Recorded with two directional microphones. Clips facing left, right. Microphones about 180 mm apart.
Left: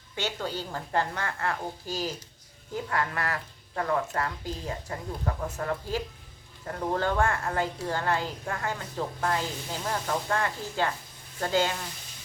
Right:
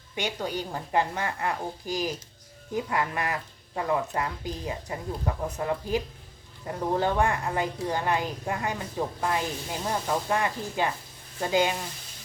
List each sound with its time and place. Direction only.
0.2 s a woman's voice: 15° right (ahead or behind)